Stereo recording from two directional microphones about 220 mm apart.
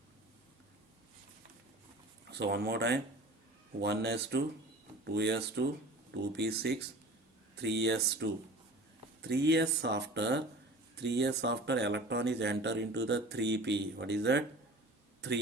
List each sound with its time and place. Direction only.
2.3 s speech: 50° right (ahead or behind)